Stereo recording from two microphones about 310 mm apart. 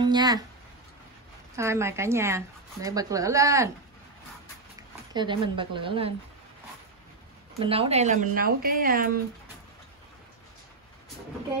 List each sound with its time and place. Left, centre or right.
0.0 s a sound: centre
1.6 s speech: centre
5.1 s speech: centre
7.5 s speech: centre